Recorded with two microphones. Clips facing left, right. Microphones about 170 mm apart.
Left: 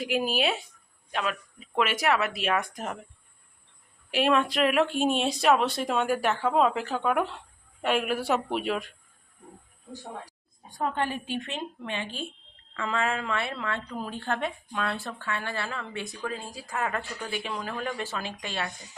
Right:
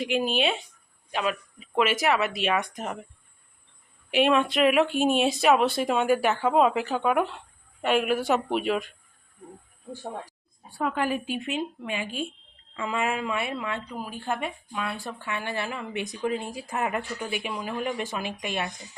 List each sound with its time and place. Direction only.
0.0 s speech: 5° left (ahead or behind)
4.1 s speech: centre (ahead or behind)
10.8 s a woman's voice: 30° left (ahead or behind)
11.3 s speech: 10° right (ahead or behind)